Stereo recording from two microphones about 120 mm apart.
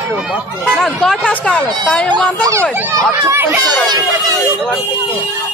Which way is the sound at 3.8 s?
35° right (ahead or behind).